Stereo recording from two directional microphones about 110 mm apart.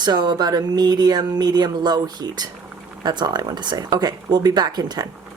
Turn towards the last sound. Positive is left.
turn(degrees=-40)  # may be behind; listen again after turning